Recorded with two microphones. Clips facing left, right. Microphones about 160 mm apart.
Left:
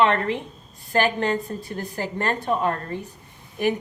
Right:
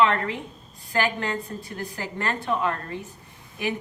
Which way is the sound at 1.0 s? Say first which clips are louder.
Left 4 dB; 40° left (ahead or behind).